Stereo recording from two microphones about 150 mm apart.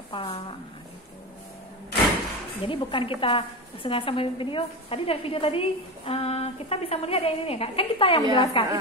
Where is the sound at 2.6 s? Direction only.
35° left (ahead or behind).